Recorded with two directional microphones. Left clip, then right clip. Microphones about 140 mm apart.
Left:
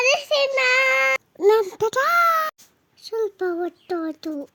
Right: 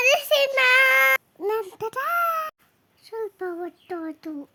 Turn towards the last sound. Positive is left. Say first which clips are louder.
# left 5 dB
turn(degrees=20)  # may be behind; listen again after turning